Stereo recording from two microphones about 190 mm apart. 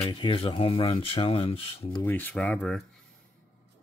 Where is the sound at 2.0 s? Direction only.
10° left (ahead or behind).